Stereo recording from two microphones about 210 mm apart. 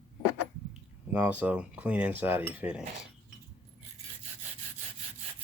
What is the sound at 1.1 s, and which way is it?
Cutlery, 10° right (ahead or behind).